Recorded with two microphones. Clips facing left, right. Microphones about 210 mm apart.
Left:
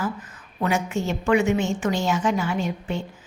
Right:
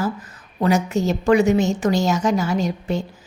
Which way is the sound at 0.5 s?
40° right (ahead or behind).